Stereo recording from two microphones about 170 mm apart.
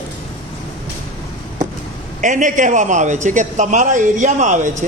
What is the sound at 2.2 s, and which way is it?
A man's voice, 50° right (ahead or behind).